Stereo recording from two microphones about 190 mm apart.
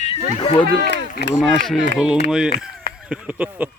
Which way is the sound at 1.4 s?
Centre (ahead or behind).